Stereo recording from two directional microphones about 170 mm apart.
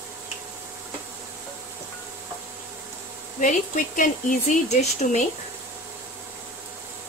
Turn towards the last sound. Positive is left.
turn(degrees=45)  # may be behind; listen again after turning